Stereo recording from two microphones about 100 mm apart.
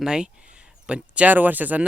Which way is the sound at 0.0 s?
5° right (ahead or behind).